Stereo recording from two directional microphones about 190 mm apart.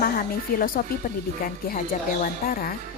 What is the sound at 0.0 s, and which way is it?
Speech, 50° left (ahead or behind).